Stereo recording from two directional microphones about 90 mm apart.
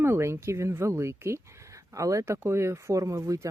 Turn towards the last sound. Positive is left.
turn(degrees=-35)  # may be behind; listen again after turning